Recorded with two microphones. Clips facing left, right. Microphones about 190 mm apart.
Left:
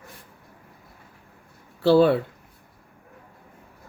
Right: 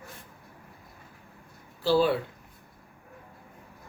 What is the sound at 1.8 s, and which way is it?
Speech, 60° left (ahead or behind).